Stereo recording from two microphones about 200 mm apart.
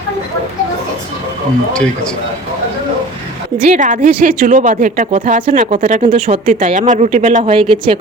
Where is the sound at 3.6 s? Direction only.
40° right (ahead or behind).